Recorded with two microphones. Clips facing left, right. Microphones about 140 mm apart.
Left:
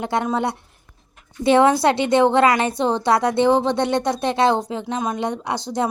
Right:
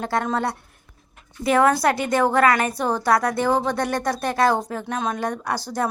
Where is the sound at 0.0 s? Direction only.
20° left (ahead or behind).